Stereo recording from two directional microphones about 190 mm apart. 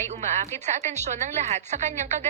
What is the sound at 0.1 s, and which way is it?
A woman's voice, 35° right (ahead or behind).